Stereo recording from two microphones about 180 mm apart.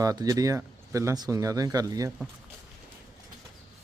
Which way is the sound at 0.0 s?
20° right (ahead or behind).